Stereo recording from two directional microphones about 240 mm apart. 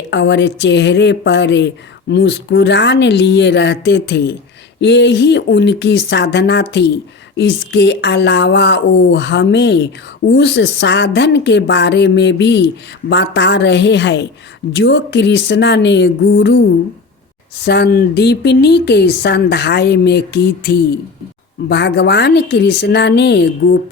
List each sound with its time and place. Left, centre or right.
0.1 s speech: left